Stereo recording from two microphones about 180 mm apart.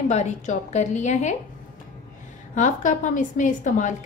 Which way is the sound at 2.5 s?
45° left (ahead or behind).